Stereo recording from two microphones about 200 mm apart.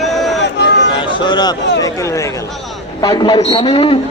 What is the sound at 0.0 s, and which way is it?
Run, centre (ahead or behind).